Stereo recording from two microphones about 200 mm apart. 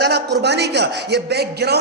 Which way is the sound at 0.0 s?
55° right (ahead or behind).